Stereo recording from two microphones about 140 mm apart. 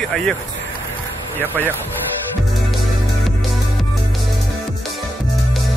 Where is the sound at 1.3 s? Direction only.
15° right (ahead or behind).